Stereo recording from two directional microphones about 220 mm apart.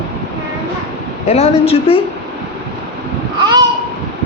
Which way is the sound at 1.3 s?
30° left (ahead or behind).